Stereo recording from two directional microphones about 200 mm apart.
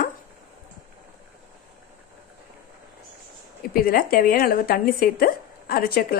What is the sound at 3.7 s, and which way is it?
A woman's voice, 45° left (ahead or behind).